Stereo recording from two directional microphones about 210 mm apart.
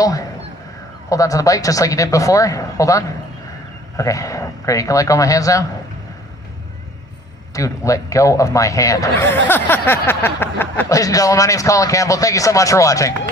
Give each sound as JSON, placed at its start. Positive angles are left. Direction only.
{"t": 0.0, "sound": "speech", "side_deg": 15}
{"t": 7.5, "sound": "speech", "side_deg": 15}